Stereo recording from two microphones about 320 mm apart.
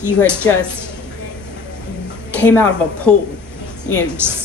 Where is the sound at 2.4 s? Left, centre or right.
Centre.